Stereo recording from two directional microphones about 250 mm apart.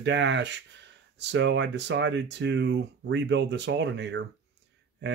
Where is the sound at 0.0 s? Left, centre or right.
Right.